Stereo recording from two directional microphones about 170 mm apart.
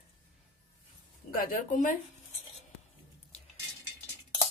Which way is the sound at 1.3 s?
55° left (ahead or behind).